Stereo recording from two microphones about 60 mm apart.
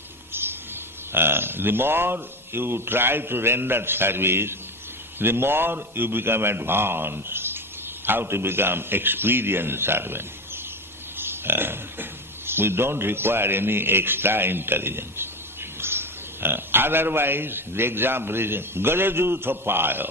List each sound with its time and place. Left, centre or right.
1.1 s a man's voice: right